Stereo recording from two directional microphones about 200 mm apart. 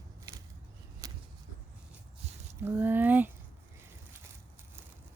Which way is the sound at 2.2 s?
30° right (ahead or behind).